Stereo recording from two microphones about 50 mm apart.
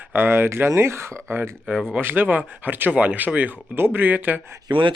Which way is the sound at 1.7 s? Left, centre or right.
Right.